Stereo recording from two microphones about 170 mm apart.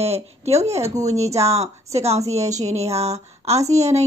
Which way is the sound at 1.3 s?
40° right (ahead or behind).